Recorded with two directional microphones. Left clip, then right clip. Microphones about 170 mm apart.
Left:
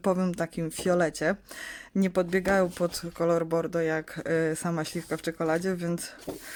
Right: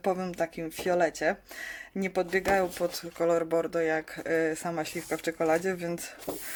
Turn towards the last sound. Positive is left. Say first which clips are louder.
# right 1 dB
turn(degrees=30)  # may be behind; listen again after turning